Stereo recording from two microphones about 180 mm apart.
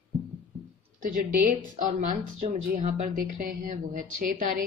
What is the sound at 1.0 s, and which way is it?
Speech, 45° right (ahead or behind).